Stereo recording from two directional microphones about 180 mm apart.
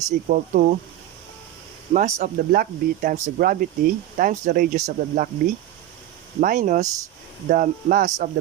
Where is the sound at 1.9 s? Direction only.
50° right (ahead or behind).